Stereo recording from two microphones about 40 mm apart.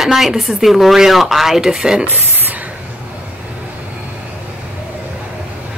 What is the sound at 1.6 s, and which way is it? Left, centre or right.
Speech, centre.